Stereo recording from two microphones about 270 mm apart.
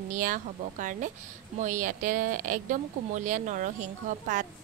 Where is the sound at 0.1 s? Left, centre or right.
Right.